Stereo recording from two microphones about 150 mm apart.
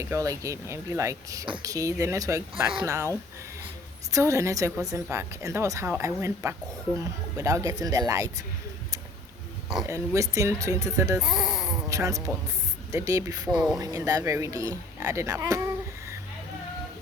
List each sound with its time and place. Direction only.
0.0 s speech: 20° right (ahead or behind)
4.1 s a woman's voice: 20° right (ahead or behind)
9.8 s speech: 20° right (ahead or behind)
11.2 s speech: centre (ahead or behind)
11.9 s speech: 20° right (ahead or behind)
13.5 s speech: 5° right (ahead or behind)
13.7 s speech: 25° right (ahead or behind)